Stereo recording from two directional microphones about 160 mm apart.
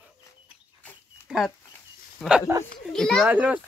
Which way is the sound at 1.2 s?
Centre (ahead or behind).